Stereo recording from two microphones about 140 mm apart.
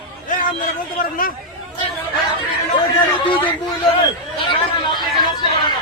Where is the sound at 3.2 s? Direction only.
35° left (ahead or behind).